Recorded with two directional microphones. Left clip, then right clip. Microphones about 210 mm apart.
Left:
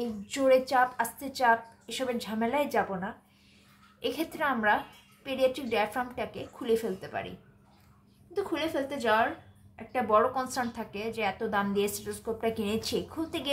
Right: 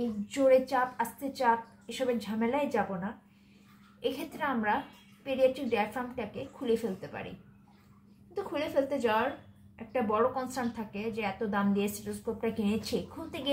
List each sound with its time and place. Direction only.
0.3 s a woman's voice: 40° left (ahead or behind)
8.3 s a woman's voice: 40° left (ahead or behind)